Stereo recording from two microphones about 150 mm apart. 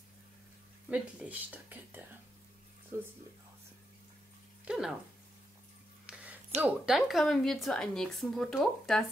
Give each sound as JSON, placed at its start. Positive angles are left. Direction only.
{"t": 0.8, "sound": "speech", "side_deg": -10}
{"t": 4.6, "sound": "a woman's voice", "side_deg": 0}
{"t": 6.0, "sound": "a sound", "side_deg": -10}
{"t": 6.6, "sound": "a woman's voice", "side_deg": 0}